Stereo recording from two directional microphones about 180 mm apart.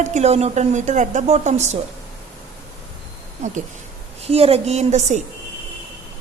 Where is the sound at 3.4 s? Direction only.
40° right (ahead or behind).